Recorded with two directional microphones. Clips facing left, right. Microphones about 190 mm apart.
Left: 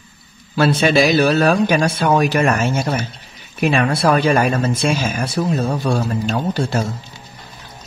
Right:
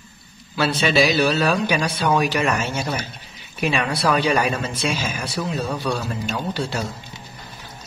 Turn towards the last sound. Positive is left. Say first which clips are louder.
# left 5 dB
turn(degrees=45)  # may be behind; listen again after turning